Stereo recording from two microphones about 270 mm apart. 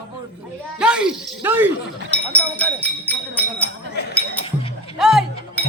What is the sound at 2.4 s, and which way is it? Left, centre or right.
Speech, centre.